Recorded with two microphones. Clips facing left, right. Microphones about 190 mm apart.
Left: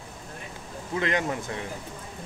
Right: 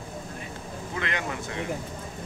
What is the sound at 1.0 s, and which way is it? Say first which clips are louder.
Speech: left 5 dB; 40° left (ahead or behind).